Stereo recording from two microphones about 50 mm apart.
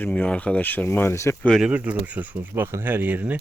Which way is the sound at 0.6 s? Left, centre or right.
Left.